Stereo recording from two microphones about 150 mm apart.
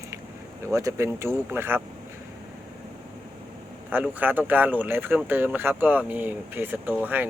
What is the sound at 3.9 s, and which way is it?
Speech, 10° right (ahead or behind).